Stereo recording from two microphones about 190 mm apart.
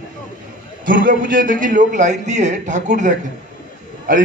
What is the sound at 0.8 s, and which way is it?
A man's voice, 45° right (ahead or behind).